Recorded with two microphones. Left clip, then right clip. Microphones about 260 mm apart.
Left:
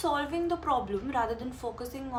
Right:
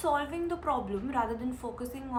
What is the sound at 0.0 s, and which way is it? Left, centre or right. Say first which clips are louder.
A woman's voice: left 1 dB; centre.